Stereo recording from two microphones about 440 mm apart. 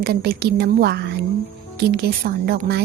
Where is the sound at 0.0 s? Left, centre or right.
Right.